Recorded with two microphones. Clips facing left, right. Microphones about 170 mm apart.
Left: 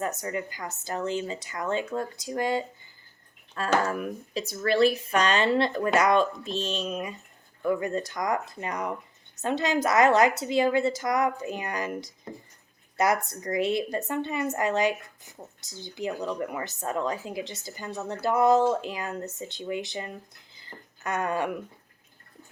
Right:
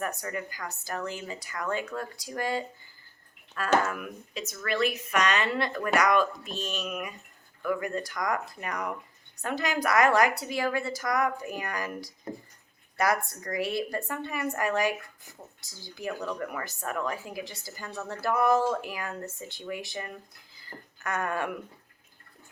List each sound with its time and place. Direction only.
0.0 s a woman's voice: 20° left (ahead or behind)
3.8 s a woman's voice: 35° left (ahead or behind)
20.6 s a sound: 20° left (ahead or behind)